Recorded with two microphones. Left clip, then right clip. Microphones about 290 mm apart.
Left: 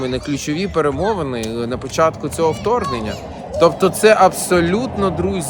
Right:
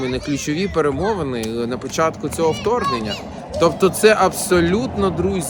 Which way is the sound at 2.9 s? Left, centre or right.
Right.